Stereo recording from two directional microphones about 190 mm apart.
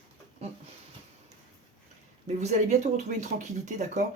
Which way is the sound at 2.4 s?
35° right (ahead or behind).